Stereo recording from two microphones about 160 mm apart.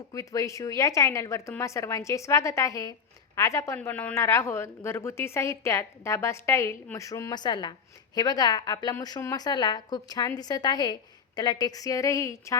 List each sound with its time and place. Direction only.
0.1 s a woman's voice: 20° left (ahead or behind)